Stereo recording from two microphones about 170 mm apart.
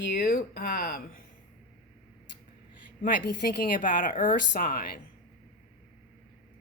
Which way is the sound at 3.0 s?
60° left (ahead or behind).